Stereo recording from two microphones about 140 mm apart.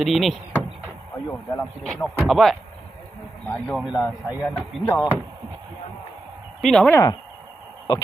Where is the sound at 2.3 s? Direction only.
Centre (ahead or behind).